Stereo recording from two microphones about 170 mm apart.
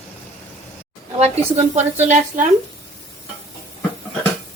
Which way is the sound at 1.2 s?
40° right (ahead or behind).